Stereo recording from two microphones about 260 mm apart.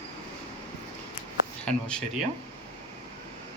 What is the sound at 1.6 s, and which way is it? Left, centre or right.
Speech, centre.